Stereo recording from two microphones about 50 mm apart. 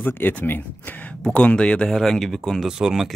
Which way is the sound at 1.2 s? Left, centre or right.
Centre.